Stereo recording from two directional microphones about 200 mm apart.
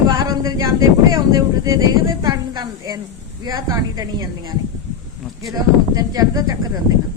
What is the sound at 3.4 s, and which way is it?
A woman's voice, 20° right (ahead or behind).